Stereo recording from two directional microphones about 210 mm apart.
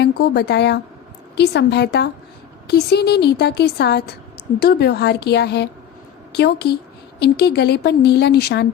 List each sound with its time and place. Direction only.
0.0 s a woman's voice: 50° left (ahead or behind)